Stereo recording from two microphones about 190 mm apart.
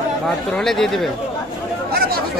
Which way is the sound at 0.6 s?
Centre (ahead or behind).